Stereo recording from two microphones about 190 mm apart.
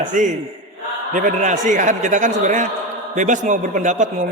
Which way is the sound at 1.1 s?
40° right (ahead or behind).